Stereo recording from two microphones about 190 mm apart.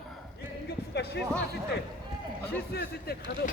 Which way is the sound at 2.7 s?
55° left (ahead or behind).